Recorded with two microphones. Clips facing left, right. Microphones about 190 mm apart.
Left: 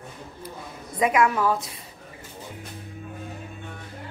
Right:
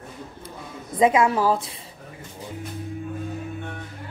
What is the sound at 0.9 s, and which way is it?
Speech, 25° right (ahead or behind).